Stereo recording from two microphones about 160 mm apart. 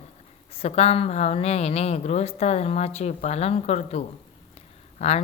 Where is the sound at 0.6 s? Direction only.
40° left (ahead or behind).